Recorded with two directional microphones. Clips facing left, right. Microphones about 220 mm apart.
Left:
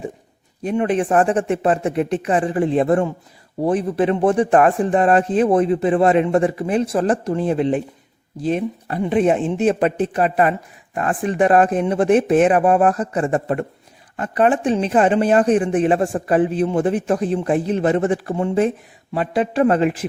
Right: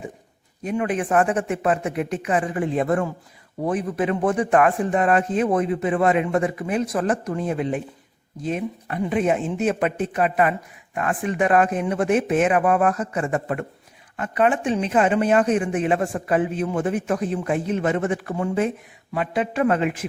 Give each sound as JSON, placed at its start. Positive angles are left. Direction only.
{"t": 0.6, "sound": "speech", "side_deg": 30}